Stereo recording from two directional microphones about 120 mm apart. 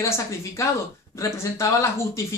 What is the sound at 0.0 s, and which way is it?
A woman's voice, 25° left (ahead or behind).